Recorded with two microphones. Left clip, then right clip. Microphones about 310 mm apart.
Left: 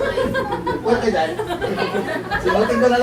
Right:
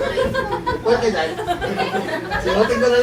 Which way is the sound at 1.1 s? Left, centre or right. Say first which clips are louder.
Left 1 dB; centre.